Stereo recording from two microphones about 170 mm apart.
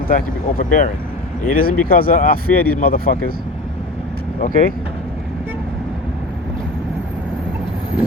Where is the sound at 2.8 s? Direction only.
60° left (ahead or behind).